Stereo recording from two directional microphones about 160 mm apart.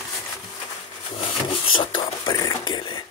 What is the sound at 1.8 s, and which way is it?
Speech, 30° left (ahead or behind).